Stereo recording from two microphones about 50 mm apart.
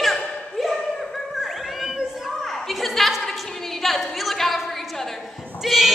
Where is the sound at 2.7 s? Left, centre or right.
Centre.